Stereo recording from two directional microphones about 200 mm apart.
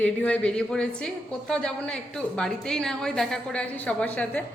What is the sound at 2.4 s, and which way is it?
A woman's voice, 5° left (ahead or behind).